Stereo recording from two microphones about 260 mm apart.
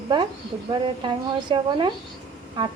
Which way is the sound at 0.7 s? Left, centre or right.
Centre.